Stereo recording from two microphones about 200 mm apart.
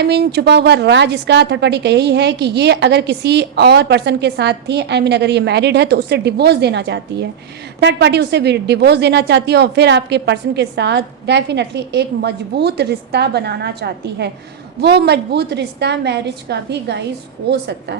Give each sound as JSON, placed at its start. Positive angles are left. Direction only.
{"t": 0.0, "sound": "a woman's voice", "side_deg": -55}